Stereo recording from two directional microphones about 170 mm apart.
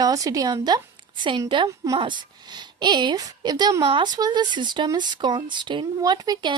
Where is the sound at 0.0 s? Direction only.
20° right (ahead or behind).